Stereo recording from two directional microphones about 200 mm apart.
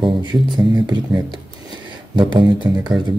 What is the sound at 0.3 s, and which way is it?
Speech, 20° right (ahead or behind).